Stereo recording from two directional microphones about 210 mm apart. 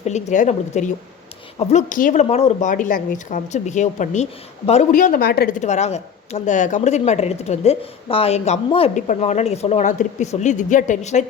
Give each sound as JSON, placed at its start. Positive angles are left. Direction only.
{"t": 0.0, "sound": "speech", "side_deg": 35}